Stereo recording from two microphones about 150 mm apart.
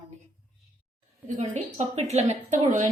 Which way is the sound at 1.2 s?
50° right (ahead or behind).